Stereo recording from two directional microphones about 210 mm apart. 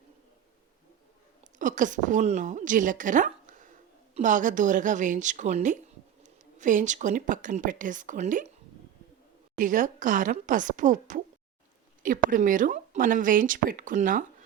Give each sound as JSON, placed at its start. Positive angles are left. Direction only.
{"t": 1.5, "sound": "a woman's voice", "side_deg": -35}
{"t": 9.6, "sound": "speech", "side_deg": -40}